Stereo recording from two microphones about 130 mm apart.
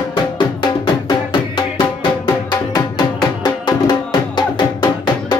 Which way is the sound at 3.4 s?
35° left (ahead or behind).